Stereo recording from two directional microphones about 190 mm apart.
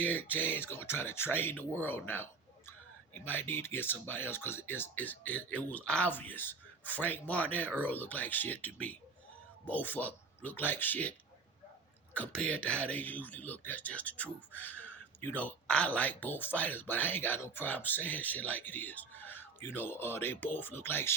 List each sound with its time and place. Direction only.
0.0 s speech: 10° left (ahead or behind)
3.2 s speech: 10° left (ahead or behind)
12.1 s speech: 5° left (ahead or behind)